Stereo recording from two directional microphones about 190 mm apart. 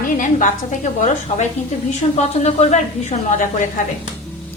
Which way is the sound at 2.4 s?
35° left (ahead or behind).